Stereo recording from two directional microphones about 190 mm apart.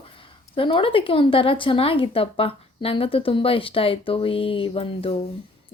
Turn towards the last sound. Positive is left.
turn(degrees=30)  # may be behind; listen again after turning